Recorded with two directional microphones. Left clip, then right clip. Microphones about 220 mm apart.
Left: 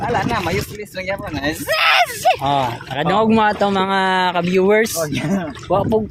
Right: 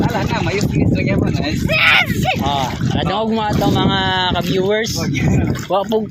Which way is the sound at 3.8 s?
25° left (ahead or behind).